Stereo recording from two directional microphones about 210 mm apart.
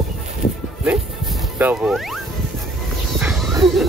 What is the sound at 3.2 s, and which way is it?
Music, 5° right (ahead or behind).